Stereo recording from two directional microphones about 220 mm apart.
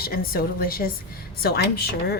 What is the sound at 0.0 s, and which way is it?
A woman's voice, 45° left (ahead or behind).